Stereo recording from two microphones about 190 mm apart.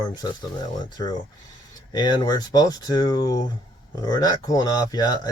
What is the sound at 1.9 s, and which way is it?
Speech, 20° left (ahead or behind).